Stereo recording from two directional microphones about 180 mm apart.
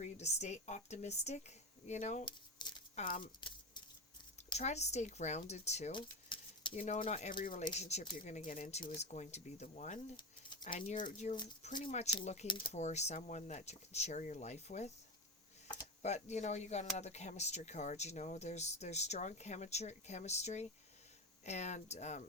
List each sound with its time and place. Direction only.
0.0 s speech: 40° left (ahead or behind)
2.2 s crumpling: 25° left (ahead or behind)
2.9 s speech: 50° left (ahead or behind)
3.2 s a sound: 25° left (ahead or behind)
4.5 s speech: 40° left (ahead or behind)
5.9 s a sound: 25° left (ahead or behind)
6.7 s speech: 40° left (ahead or behind)
10.2 s a sound: 25° left (ahead or behind)
10.7 s speech: 45° left (ahead or behind)
12.5 s speech: 30° left (ahead or behind)
16.0 s speech: 40° left (ahead or behind)